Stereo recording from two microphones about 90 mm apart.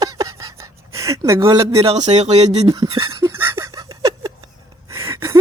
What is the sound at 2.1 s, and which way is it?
Speech, 90° right.